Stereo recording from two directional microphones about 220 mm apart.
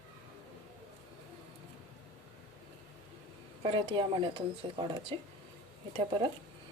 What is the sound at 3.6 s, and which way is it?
A woman's voice, 25° right (ahead or behind).